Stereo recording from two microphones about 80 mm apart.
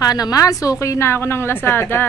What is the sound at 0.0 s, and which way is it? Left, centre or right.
A woman's voice, left.